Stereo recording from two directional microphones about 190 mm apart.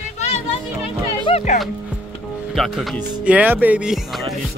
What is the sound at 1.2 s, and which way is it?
Speech, 35° left (ahead or behind).